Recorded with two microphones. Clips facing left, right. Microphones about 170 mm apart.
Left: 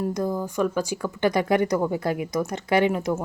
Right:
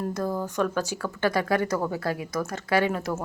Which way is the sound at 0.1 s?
15° left (ahead or behind).